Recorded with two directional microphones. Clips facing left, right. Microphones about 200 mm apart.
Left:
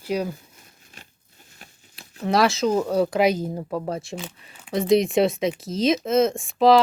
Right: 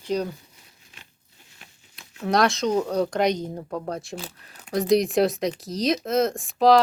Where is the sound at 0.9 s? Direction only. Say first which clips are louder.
Left 4 dB; 45° left (ahead or behind).